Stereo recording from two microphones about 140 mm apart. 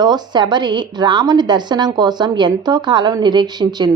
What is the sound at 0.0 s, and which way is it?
A woman's voice, 30° right (ahead or behind).